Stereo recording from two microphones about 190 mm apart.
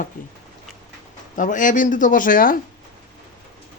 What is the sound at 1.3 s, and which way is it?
Speech, 45° left (ahead or behind).